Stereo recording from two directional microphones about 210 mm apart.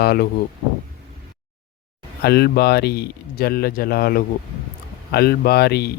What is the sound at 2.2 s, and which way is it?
Speech, 50° left (ahead or behind).